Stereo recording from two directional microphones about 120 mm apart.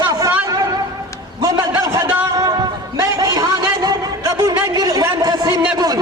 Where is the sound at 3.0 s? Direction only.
30° right (ahead or behind).